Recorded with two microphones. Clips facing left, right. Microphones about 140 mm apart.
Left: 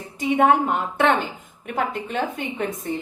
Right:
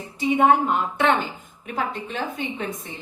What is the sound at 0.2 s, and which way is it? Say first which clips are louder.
Speech: even; 50° left (ahead or behind).